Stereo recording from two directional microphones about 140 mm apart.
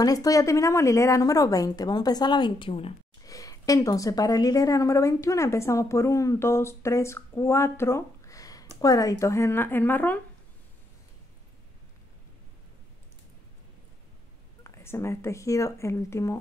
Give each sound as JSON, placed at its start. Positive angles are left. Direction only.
{"t": 0.0, "sound": "a woman's voice", "side_deg": 25}
{"t": 3.3, "sound": "a woman's voice", "side_deg": 25}
{"t": 14.6, "sound": "a woman's voice", "side_deg": 20}